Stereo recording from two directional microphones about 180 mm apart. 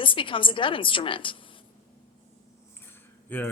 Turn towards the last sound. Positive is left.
turn(degrees=10)  # may be behind; listen again after turning